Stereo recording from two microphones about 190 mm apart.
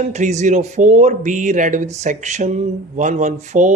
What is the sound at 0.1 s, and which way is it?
Speech, 40° right (ahead or behind).